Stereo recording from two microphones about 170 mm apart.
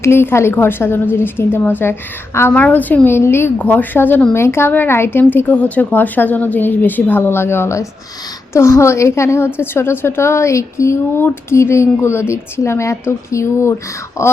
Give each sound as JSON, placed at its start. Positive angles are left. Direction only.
{"t": 0.0, "sound": "a woman's voice", "side_deg": 15}